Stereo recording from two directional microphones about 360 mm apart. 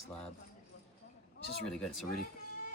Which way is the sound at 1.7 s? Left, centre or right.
Centre.